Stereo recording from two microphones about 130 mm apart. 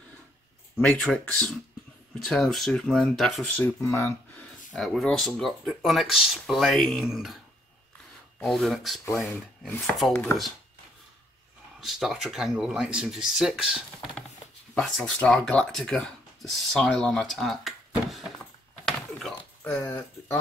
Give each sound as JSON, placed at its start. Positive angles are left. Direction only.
{"t": 0.7, "sound": "speech", "side_deg": 5}
{"t": 3.5, "sound": "speech", "side_deg": 20}
{"t": 4.7, "sound": "speech", "side_deg": 5}
{"t": 8.4, "sound": "speech", "side_deg": 0}
{"t": 11.8, "sound": "speech", "side_deg": 0}
{"t": 15.1, "sound": "speech", "side_deg": 5}
{"t": 18.9, "sound": "a sound", "side_deg": 5}
{"t": 19.8, "sound": "speech", "side_deg": 20}